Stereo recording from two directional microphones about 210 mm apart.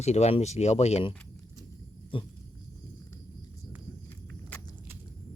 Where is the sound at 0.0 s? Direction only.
30° left (ahead or behind).